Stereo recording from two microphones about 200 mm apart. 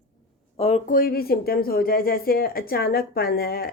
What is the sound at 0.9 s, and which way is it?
Speech, 45° left (ahead or behind).